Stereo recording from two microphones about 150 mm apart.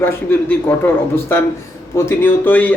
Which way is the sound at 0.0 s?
15° left (ahead or behind).